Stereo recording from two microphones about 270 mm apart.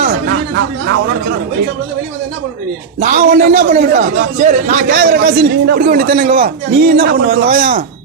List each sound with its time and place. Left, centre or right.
3.0 s a man's voice: right